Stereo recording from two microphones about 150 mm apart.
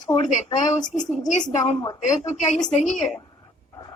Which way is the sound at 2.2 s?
45° left (ahead or behind).